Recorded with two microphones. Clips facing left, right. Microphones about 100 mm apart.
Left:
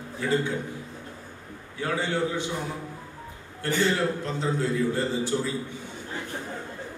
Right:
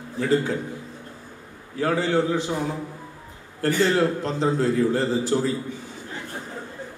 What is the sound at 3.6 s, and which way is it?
A man's voice, 40° right (ahead or behind).